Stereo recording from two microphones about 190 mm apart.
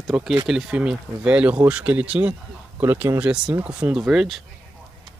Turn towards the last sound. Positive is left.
turn(degrees=0)  # may be behind; listen again after turning